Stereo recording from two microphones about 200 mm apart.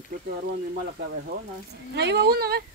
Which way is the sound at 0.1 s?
40° right (ahead or behind).